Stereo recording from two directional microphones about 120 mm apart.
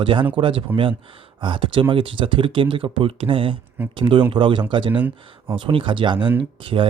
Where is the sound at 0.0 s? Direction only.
45° right (ahead or behind).